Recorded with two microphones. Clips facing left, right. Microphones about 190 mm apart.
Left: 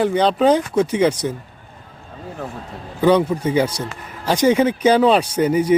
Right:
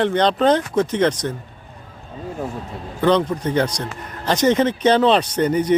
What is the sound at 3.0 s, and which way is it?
Speech, 10° left (ahead or behind).